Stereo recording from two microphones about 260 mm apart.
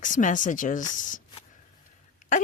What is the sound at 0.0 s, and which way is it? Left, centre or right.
Speech, left.